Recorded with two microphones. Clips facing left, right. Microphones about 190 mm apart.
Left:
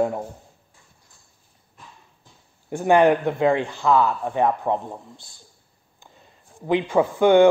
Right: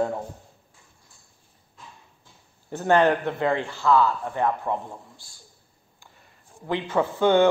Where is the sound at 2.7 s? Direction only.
15° left (ahead or behind).